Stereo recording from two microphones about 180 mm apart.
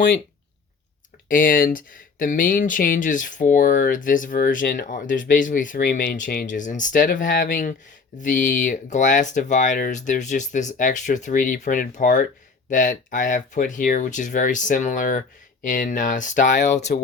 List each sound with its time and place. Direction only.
1.3 s speech: 50° left (ahead or behind)